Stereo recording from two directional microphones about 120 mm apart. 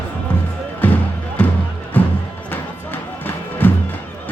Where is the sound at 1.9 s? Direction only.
15° left (ahead or behind).